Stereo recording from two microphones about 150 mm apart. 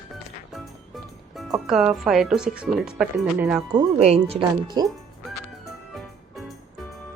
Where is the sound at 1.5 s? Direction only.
5° right (ahead or behind).